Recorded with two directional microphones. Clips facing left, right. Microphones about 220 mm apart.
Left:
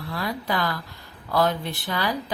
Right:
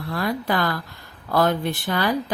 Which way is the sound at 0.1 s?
50° right (ahead or behind).